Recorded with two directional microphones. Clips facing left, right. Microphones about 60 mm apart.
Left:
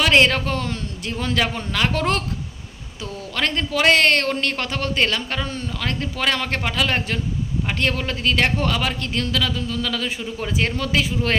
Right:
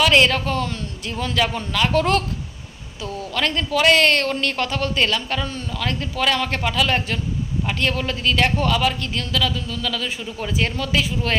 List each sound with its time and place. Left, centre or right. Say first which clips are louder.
0.0 s speech: even; left
3.3 s a man's voice: right 1 dB; left
3.9 s speech: even; left